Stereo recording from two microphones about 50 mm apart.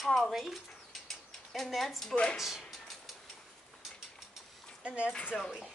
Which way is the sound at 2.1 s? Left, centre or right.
Left.